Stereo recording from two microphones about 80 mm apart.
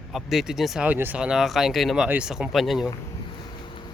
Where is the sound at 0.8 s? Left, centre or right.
Right.